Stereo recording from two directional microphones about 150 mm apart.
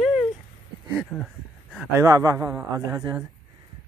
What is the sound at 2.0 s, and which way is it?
A man's voice, 20° right (ahead or behind).